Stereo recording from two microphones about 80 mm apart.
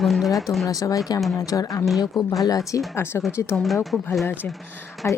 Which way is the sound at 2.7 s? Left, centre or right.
Left.